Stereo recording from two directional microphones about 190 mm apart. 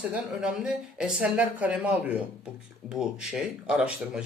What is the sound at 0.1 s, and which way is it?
A man's voice, 5° right (ahead or behind).